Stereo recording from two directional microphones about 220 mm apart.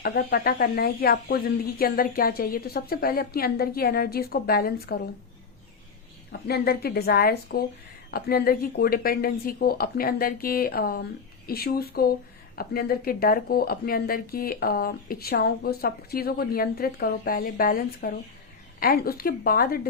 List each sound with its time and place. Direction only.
0.0 s speech: 45° left (ahead or behind)
6.5 s speech: 45° left (ahead or behind)